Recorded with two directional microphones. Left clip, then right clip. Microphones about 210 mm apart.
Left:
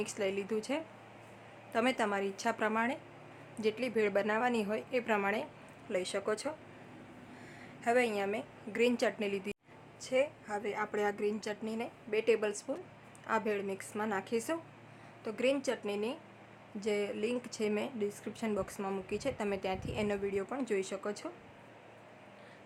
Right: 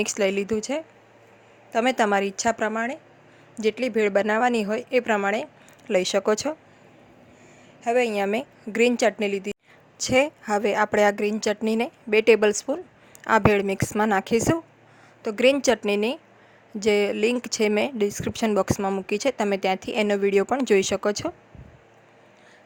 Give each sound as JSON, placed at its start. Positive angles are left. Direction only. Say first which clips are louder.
{"t": 0.0, "sound": "speech", "louder": "right 12 dB", "side_deg": -40}
{"t": 7.9, "sound": "speech", "louder": "right 9 dB", "side_deg": -25}
{"t": 10.0, "sound": "a woman's voice", "louder": "right 11 dB", "side_deg": -45}